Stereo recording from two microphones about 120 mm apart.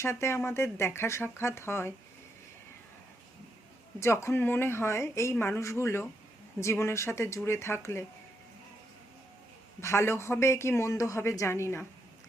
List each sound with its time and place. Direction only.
0.0 s speech: 20° left (ahead or behind)
4.0 s speech: 20° left (ahead or behind)
9.8 s speech: 20° left (ahead or behind)